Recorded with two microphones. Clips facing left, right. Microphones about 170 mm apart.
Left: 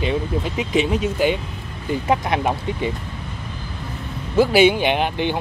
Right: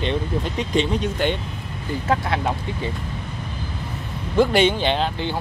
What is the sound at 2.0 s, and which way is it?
Speech, 20° left (ahead or behind).